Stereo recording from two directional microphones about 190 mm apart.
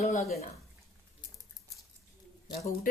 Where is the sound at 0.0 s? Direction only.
40° left (ahead or behind).